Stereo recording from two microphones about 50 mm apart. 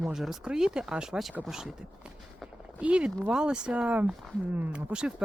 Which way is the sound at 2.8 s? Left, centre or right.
Right.